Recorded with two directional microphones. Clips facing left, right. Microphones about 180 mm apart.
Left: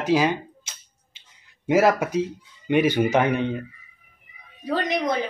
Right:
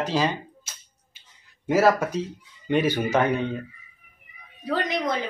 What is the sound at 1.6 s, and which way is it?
Speech, 15° left (ahead or behind).